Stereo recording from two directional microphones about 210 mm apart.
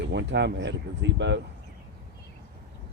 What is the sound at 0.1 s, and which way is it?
Speech, 55° right (ahead or behind).